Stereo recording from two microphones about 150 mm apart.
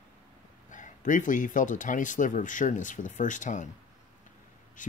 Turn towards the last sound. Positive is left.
turn(degrees=60)  # may be behind; listen again after turning